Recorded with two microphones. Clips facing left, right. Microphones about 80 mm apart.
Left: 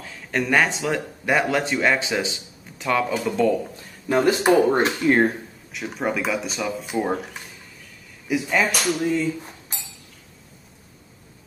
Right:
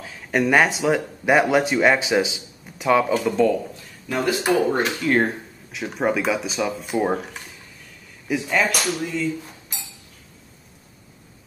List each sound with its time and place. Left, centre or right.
0.3 s speech: centre
3.3 s speech: centre
4.1 s speech: left
5.1 s speech: centre